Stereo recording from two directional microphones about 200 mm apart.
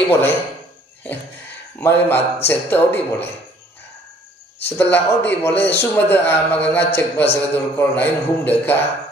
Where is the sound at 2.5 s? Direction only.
10° left (ahead or behind).